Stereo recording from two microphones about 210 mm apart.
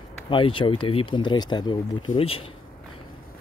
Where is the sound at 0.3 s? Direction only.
25° left (ahead or behind).